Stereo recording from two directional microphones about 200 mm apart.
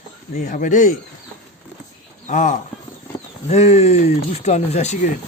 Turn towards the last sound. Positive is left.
turn(degrees=35)  # may be behind; listen again after turning